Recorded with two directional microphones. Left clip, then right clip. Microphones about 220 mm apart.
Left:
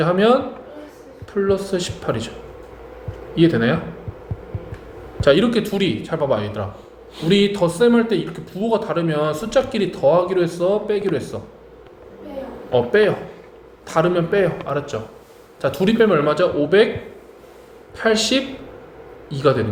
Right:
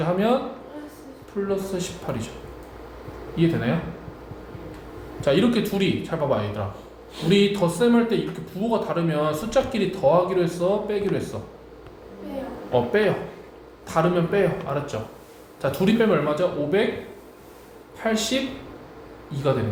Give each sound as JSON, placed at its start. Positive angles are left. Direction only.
{"t": 0.0, "sound": "speech", "side_deg": 40}
{"t": 1.5, "sound": "speech", "side_deg": 35}
{"t": 3.3, "sound": "speech", "side_deg": 35}
{"t": 5.2, "sound": "speech", "side_deg": 35}
{"t": 12.7, "sound": "speech", "side_deg": 40}
{"t": 17.9, "sound": "speech", "side_deg": 35}